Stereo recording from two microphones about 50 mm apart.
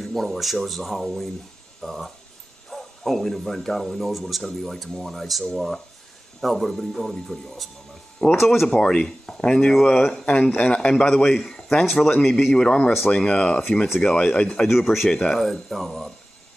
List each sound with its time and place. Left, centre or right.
0.0 s speech: centre
8.6 s speech: centre
10.2 s a man's voice: left
11.8 s speech: centre
14.7 s speech: centre
15.0 s speech: centre
15.3 s speech: centre